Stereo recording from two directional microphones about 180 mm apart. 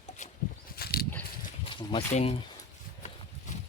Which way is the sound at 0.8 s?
60° left (ahead or behind).